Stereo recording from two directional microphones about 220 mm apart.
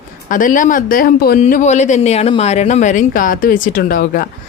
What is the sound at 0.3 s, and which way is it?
Speech, 35° left (ahead or behind).